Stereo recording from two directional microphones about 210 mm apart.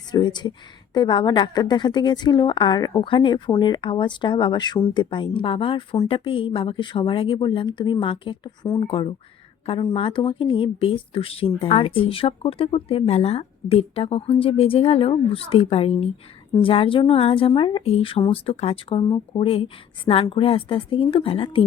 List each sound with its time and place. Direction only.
0.1 s speech: 20° left (ahead or behind)